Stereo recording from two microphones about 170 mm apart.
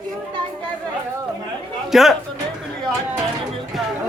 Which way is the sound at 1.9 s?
Centre (ahead or behind).